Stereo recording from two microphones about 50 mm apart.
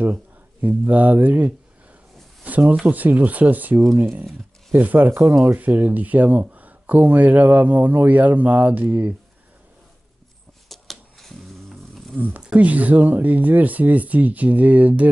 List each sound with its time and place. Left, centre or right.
0.0 s speech: right
4.0 s speech: right
10.7 s a sound: centre
12.2 s speech: right